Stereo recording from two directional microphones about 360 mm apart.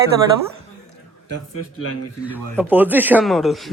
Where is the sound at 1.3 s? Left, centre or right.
Left.